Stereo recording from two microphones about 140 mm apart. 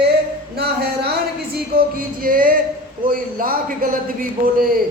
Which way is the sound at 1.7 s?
90° right.